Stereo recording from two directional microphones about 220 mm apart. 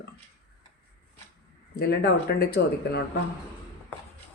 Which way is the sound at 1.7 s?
45° left (ahead or behind).